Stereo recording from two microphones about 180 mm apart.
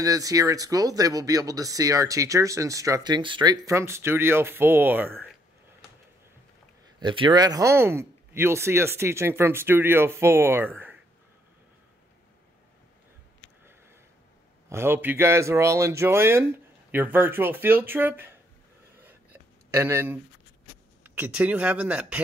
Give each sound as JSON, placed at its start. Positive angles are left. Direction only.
{"t": 0.0, "sound": "speech", "side_deg": -20}
{"t": 7.0, "sound": "speech", "side_deg": -25}
{"t": 14.7, "sound": "speech", "side_deg": -15}
{"t": 19.7, "sound": "speech", "side_deg": -15}